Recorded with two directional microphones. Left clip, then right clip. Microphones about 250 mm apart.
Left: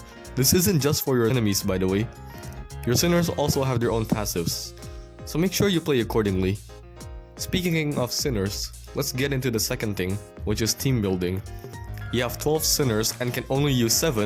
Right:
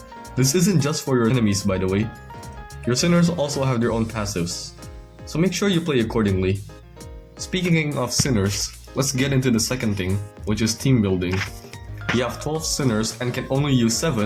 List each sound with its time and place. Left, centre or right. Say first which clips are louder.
0.3 s speech: right 1 dB; left